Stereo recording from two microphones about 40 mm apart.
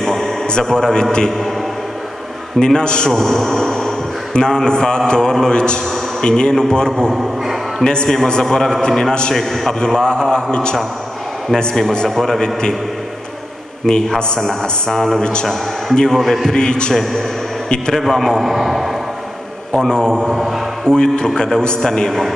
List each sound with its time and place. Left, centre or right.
0.0 s a sound: centre
0.7 s speech: centre
2.6 s a man's voice: left
3.1 s a man's voice: centre
9.8 s a man's voice: centre
11.9 s speech: centre
13.8 s a man's voice: centre
14.4 s a man's voice: centre
16.5 s a man's voice: left
16.9 s a man's voice: centre
18.4 s a man's voice: centre
19.9 s a man's voice: centre